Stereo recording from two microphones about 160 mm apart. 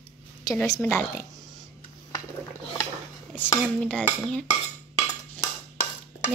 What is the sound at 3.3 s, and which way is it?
A woman's voice, 10° left (ahead or behind).